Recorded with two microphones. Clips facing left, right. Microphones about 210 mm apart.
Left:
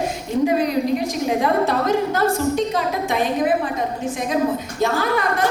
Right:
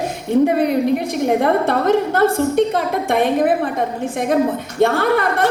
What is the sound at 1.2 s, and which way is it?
A woman's voice, 60° right (ahead or behind).